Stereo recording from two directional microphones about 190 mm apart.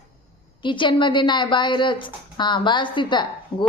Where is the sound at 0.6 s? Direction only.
25° left (ahead or behind).